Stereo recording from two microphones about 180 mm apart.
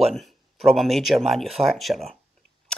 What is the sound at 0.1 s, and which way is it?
Speech, centre (ahead or behind).